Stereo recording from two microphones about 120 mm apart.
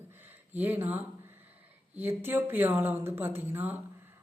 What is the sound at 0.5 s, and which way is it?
Speech, 15° right (ahead or behind).